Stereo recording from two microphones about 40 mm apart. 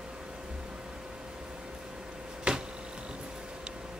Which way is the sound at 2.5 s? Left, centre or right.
Right.